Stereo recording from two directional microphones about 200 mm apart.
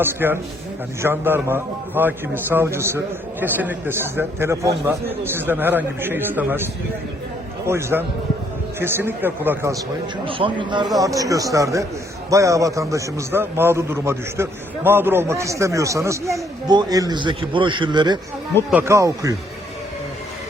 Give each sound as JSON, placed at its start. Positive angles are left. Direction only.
{"t": 0.0, "sound": "a man's voice", "side_deg": -10}
{"t": 7.7, "sound": "a man's voice", "side_deg": -15}
{"t": 10.2, "sound": "a man's voice", "side_deg": -25}
{"t": 18.7, "sound": "a man's voice", "side_deg": -10}